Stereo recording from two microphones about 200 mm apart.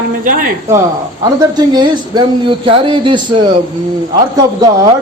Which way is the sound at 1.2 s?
20° right (ahead or behind).